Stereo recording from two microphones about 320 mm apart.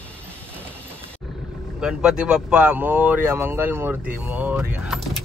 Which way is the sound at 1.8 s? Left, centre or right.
Centre.